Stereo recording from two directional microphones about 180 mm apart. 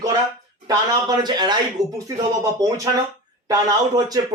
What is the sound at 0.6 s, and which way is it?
Speech, 25° right (ahead or behind).